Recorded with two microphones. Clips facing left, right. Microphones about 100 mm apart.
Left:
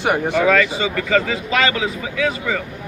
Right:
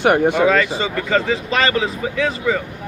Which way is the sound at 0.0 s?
55° right (ahead or behind).